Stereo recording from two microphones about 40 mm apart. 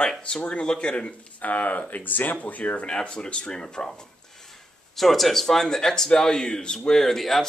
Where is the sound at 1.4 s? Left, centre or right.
Left.